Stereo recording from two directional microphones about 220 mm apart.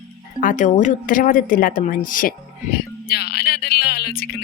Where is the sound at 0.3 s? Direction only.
35° left (ahead or behind).